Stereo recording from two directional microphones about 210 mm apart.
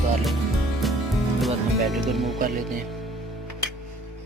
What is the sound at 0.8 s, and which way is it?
Music, centre (ahead or behind).